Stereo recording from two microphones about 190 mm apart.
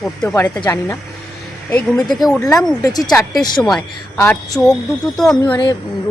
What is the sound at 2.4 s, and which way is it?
A woman's voice, 20° left (ahead or behind).